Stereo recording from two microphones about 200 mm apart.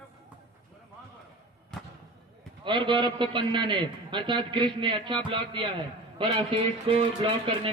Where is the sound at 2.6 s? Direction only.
25° right (ahead or behind).